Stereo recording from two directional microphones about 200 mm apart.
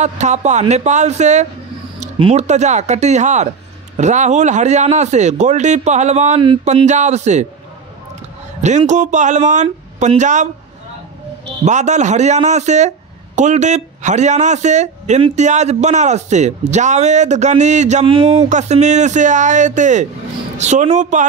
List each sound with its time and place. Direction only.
0.0 s speech: 35° right (ahead or behind)
8.6 s speech: 35° right (ahead or behind)
11.6 s speech: 35° right (ahead or behind)